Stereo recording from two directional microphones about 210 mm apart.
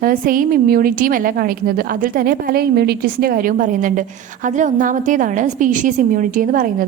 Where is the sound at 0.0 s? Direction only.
40° right (ahead or behind).